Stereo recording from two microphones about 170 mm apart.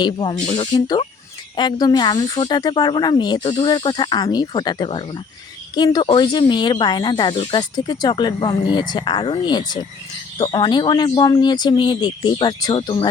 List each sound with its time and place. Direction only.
0.0 s speech: 30° left (ahead or behind)